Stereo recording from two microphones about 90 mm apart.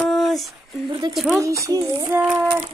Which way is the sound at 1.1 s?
Centre (ahead or behind).